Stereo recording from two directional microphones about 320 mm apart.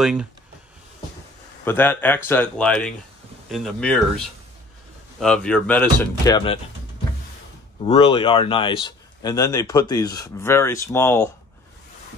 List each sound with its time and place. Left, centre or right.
0.0 s speech: centre
1.6 s speech: centre
5.2 s speech: centre
7.8 s speech: centre